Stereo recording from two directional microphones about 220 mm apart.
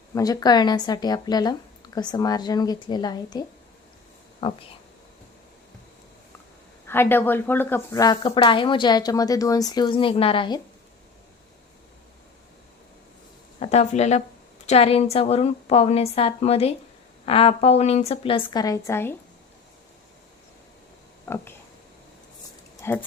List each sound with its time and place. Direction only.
0.1 s speech: 15° left (ahead or behind)
4.4 s a woman's voice: 25° left (ahead or behind)
6.8 s speech: 10° left (ahead or behind)
13.6 s a woman's voice: 30° left (ahead or behind); by 19.1 s 10° left (ahead or behind)
21.2 s a sound: 10° left (ahead or behind)
22.8 s dog: 10° left (ahead or behind)